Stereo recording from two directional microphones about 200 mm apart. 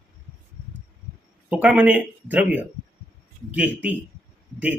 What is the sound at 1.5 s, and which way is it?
Speech, 5° right (ahead or behind).